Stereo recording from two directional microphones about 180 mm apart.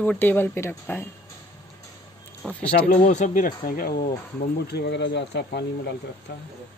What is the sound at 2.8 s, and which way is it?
Speech, 45° left (ahead or behind).